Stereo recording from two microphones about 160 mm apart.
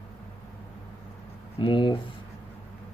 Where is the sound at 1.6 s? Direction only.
30° left (ahead or behind).